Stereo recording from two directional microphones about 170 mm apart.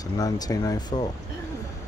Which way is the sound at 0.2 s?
20° left (ahead or behind).